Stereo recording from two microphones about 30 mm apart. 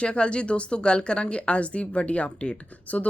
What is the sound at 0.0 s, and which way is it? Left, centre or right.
Speech, left.